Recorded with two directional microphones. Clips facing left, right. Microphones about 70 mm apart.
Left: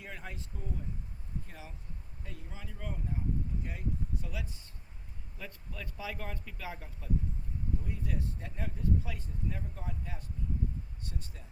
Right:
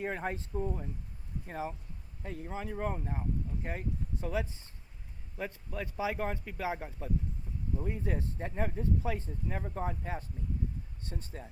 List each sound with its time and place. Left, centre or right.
0.0 s speech: right
9.6 s speech: right